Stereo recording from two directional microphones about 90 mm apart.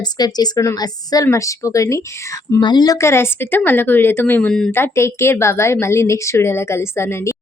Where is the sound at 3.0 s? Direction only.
30° left (ahead or behind).